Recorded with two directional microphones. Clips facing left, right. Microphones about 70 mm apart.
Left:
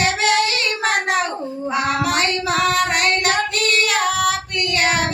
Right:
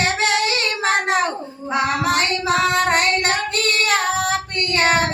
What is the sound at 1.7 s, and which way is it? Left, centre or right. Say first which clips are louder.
Female singing: right 1 dB; right.